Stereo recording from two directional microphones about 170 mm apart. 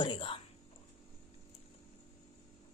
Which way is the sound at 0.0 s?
30° left (ahead or behind).